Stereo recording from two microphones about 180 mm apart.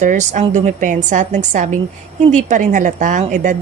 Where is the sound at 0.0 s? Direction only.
45° right (ahead or behind).